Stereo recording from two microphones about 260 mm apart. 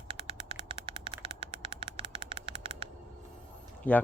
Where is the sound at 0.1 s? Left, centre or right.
Centre.